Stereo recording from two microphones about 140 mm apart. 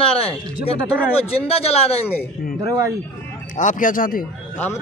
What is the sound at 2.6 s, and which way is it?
Speech, 25° right (ahead or behind).